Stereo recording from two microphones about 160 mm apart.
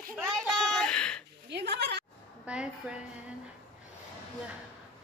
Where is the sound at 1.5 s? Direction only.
90° right.